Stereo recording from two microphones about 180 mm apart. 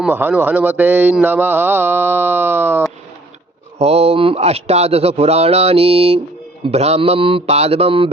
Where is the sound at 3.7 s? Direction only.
35° right (ahead or behind).